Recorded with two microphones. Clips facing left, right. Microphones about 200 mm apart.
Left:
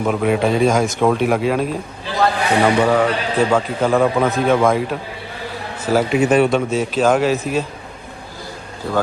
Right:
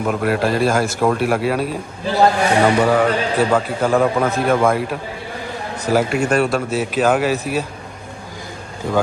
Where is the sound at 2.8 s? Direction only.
5° right (ahead or behind).